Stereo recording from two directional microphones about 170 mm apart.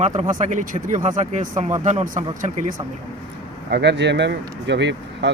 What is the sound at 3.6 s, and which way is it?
Speech, 80° right.